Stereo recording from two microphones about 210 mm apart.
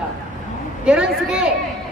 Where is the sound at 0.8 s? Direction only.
5° right (ahead or behind).